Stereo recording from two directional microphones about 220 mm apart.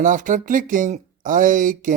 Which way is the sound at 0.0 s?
35° right (ahead or behind).